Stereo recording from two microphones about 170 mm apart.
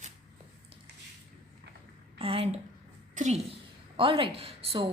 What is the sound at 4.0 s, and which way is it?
Speech, 30° right (ahead or behind).